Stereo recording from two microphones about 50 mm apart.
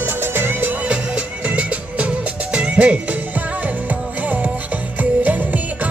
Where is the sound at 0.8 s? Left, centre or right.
Right.